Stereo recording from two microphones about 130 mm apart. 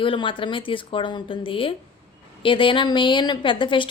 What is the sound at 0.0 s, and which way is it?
A woman's voice, 40° left (ahead or behind).